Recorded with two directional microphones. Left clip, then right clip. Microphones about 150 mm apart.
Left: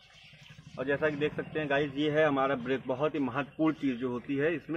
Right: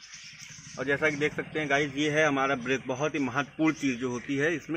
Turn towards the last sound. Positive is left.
turn(degrees=-45)  # may be behind; listen again after turning